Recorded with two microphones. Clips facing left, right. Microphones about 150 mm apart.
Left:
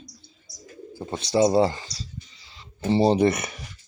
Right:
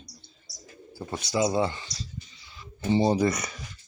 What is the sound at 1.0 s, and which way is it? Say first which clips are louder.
Speech: left 5 dB; 25° left (ahead or behind).